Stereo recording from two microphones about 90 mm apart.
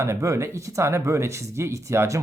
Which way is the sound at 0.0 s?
35° right (ahead or behind).